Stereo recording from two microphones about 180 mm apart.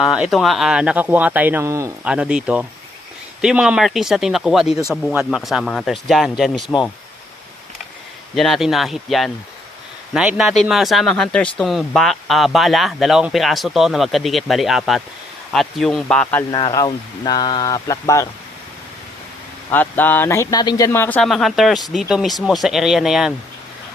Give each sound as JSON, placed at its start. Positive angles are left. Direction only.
{"t": 0.0, "sound": "speech", "side_deg": 0}
{"t": 2.0, "sound": "speech", "side_deg": -5}
{"t": 8.4, "sound": "speech", "side_deg": 0}
{"t": 16.5, "sound": "speech", "side_deg": 25}
{"t": 19.7, "sound": "speech", "side_deg": 10}